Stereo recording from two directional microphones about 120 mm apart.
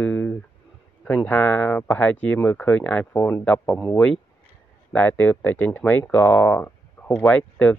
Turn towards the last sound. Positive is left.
turn(degrees=10)  # may be behind; listen again after turning